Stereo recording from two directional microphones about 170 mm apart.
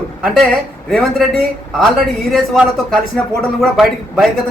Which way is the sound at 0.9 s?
Centre (ahead or behind).